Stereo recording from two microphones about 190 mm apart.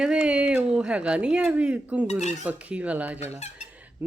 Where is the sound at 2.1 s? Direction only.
35° left (ahead or behind).